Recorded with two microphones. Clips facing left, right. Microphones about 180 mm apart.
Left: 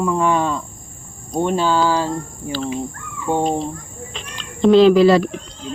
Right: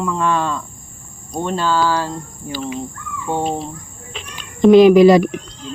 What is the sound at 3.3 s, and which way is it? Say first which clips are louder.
Speech: left 2 dB; 15° left (ahead or behind).